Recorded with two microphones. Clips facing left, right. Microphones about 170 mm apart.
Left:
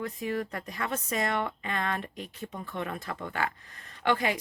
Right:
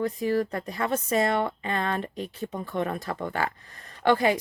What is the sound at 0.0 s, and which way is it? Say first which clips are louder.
A woman's voice: right 7 dB; 35° right (ahead or behind).